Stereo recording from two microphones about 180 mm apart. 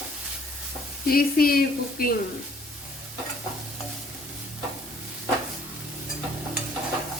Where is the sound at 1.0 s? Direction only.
55° left (ahead or behind).